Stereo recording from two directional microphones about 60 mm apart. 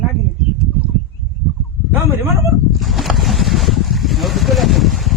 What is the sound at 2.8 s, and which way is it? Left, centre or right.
Boat, centre.